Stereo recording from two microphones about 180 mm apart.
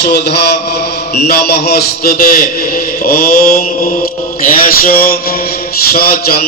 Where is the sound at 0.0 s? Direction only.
65° left (ahead or behind).